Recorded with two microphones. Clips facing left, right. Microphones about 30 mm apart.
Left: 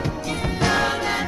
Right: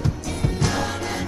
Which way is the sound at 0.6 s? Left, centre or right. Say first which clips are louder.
Left 5 dB; left.